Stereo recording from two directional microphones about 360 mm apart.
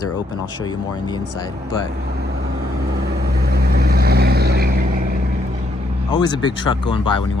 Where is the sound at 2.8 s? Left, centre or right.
Right.